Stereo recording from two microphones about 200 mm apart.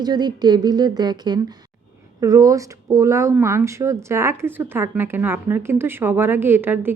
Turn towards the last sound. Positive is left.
turn(degrees=-10)  # may be behind; listen again after turning